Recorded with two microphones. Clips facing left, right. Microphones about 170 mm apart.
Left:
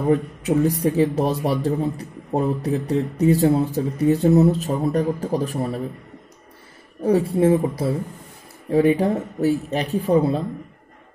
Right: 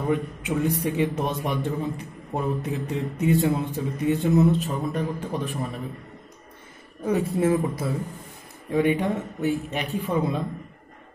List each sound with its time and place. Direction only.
0.1 s speech: 40° left (ahead or behind)
7.0 s speech: 30° left (ahead or behind)